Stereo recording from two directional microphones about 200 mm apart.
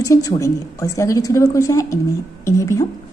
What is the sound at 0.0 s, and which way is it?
A woman's voice, 15° left (ahead or behind).